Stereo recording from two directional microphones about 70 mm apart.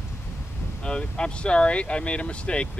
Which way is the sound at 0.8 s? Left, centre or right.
Centre.